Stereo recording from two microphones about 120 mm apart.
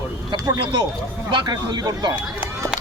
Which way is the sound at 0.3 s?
35° right (ahead or behind).